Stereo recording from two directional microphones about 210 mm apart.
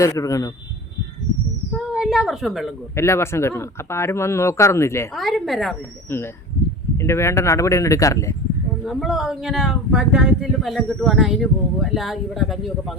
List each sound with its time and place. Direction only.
0.0 s speech: 15° left (ahead or behind)
1.9 s a woman's voice: centre (ahead or behind)
2.9 s speech: 15° left (ahead or behind)
5.1 s speech: centre (ahead or behind)
6.9 s speech: 15° left (ahead or behind)
8.8 s speech: centre (ahead or behind)